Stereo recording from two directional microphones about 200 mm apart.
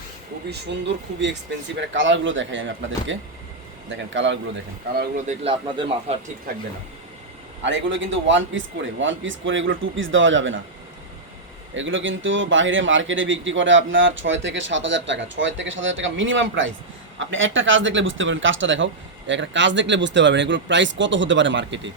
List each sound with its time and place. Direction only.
0.5 s a man's voice: 60° right (ahead or behind)
3.8 s a man's voice: 65° right (ahead or behind)
4.9 s speech: 35° right (ahead or behind)
7.6 s a man's voice: 70° right (ahead or behind)
11.7 s a man's voice: 70° right (ahead or behind)